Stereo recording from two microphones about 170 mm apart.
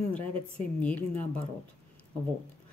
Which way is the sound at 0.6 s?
10° left (ahead or behind).